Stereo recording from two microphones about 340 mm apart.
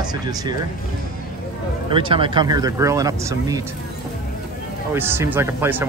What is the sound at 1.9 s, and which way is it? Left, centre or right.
Speech, centre.